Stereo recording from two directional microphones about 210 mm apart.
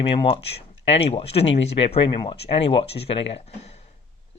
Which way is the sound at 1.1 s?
30° left (ahead or behind).